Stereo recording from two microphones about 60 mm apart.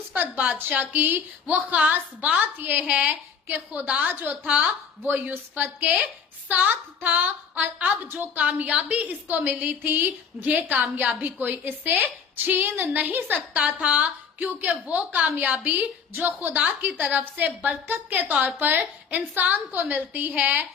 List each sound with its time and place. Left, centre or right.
0.1 s a woman's voice: right
4.1 s a woman's voice: right
4.4 s a woman's voice: right
5.8 s a woman's voice: right
8.0 s a woman's voice: right
8.4 s a woman's voice: right
16.1 s a woman's voice: right
16.5 s a woman's voice: right